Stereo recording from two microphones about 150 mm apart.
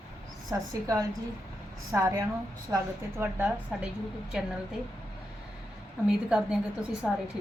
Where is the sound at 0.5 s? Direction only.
20° right (ahead or behind).